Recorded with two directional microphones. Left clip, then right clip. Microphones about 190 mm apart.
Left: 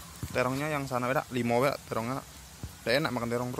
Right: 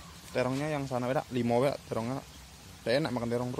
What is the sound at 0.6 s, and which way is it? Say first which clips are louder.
Speech: left 2 dB; 20° right (ahead or behind).